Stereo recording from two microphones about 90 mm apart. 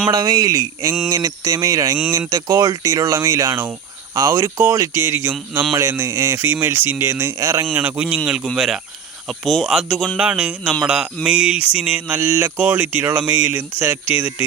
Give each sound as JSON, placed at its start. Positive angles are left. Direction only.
{"t": 0.1, "sound": "speech", "side_deg": -45}
{"t": 7.7, "sound": "speech", "side_deg": -15}